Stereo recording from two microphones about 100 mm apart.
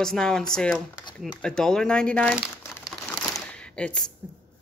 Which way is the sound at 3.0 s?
10° left (ahead or behind).